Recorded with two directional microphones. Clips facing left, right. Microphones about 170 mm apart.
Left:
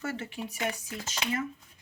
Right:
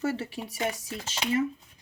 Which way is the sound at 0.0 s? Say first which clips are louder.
Right 5 dB; 35° right (ahead or behind).